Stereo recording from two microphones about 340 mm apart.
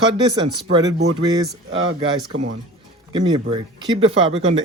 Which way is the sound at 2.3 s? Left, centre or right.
Right.